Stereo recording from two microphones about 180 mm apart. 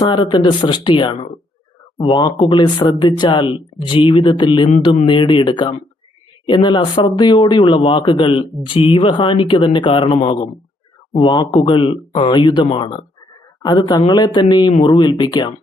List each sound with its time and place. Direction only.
0.0 s speech: 25° left (ahead or behind)